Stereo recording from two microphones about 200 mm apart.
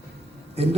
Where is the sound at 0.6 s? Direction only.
30° right (ahead or behind).